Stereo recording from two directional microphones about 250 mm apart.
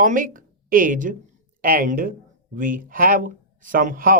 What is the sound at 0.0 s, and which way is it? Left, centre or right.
Speech, right.